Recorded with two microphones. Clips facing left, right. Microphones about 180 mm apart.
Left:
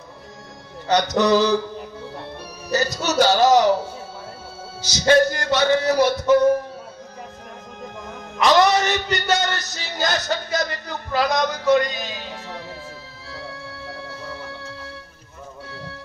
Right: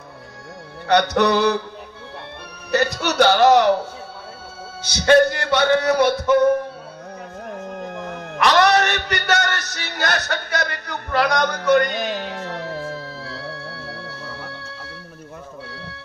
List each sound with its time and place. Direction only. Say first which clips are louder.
0.8 s speech: right 1 dB; 60° right (ahead or behind)
2.7 s speech: right 1 dB; 60° right (ahead or behind)
4.8 s speech: right 2 dB; 60° right (ahead or behind)
8.4 s a sound: even; 60° right (ahead or behind)